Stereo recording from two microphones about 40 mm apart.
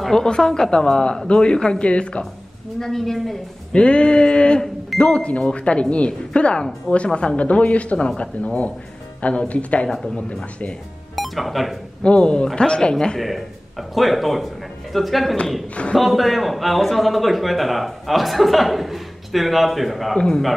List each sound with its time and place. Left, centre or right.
0.1 s speech: centre
2.8 s a woman's voice: centre
3.7 s speech: left
9.2 s speech: left
9.8 s a woman's voice: centre
10.4 s speech: left
11.1 s speech: centre
12.0 s speech: left
13.2 s a man's voice: centre
20.2 s speech: centre